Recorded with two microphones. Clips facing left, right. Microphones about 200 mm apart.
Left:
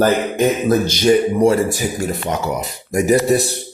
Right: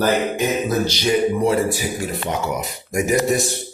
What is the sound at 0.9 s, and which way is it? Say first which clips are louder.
Speech: left 4 dB; 45° left (ahead or behind).